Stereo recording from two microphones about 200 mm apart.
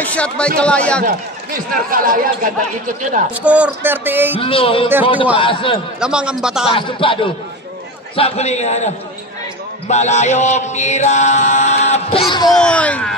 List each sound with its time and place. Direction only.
0.0 s a man's voice: 5° left (ahead or behind)
1.0 s a man's voice: 45° right (ahead or behind)
3.4 s speech: 5° right (ahead or behind)
4.4 s speech: 25° left (ahead or behind)
5.9 s a man's voice: 5° right (ahead or behind)
6.7 s speech: 25° left (ahead or behind)
8.2 s chant: 35° left (ahead or behind)
12.5 s a man's voice: 5° left (ahead or behind)